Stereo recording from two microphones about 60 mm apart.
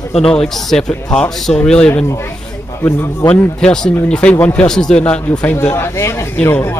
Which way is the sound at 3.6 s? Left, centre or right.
Centre.